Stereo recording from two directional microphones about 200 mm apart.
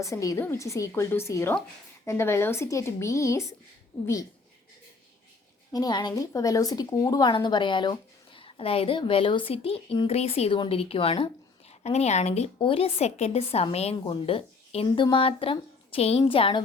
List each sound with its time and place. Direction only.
0.0 s speech: 15° left (ahead or behind)
5.7 s a woman's voice: 20° left (ahead or behind)